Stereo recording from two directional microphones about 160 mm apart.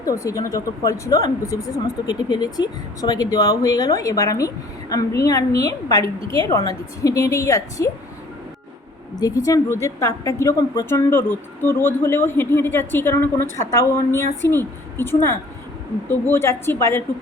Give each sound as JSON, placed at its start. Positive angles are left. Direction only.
{"t": 0.0, "sound": "speech", "side_deg": 20}
{"t": 9.2, "sound": "speech", "side_deg": 20}